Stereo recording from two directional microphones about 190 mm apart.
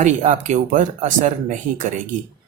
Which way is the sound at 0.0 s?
40° right (ahead or behind).